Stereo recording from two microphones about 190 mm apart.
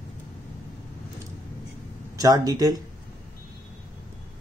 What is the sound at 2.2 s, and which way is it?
Speech, 20° right (ahead or behind).